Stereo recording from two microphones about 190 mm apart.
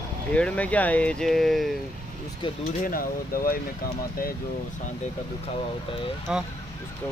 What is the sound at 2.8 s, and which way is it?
Speech, 50° left (ahead or behind).